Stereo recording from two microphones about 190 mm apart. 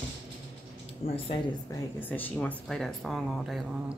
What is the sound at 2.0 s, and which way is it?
Speech, 10° left (ahead or behind).